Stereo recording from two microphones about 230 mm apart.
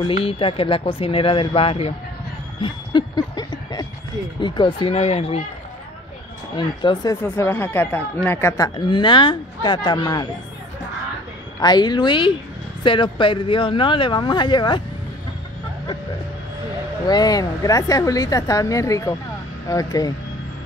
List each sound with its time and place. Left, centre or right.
0.0 s speech: left
2.6 s a sound: centre
4.4 s speech: left
6.5 s speech: centre
11.6 s speech: centre
17.1 s speech: centre